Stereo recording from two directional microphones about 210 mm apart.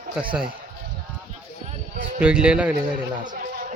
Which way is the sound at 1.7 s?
40° right (ahead or behind).